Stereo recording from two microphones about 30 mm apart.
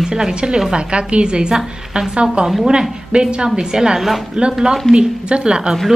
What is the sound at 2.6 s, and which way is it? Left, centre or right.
A woman's voice, right.